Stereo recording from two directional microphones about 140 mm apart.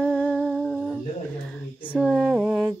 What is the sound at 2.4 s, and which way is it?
Humming, 5° right (ahead or behind).